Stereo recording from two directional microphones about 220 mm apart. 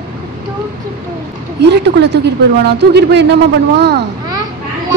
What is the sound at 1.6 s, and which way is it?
A woman's voice, 50° right (ahead or behind).